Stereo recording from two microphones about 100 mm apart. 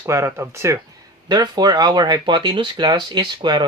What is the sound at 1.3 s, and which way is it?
Speech, 45° right (ahead or behind).